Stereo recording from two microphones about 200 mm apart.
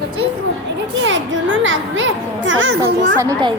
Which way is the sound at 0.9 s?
70° right (ahead or behind).